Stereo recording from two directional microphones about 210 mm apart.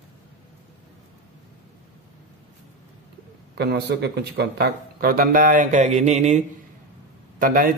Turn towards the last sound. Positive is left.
turn(degrees=-40)  # may be behind; listen again after turning